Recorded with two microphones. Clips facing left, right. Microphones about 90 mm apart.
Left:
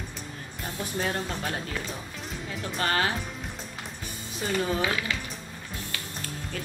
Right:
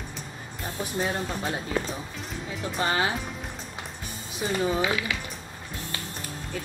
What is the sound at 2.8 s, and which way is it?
Speech, 15° right (ahead or behind).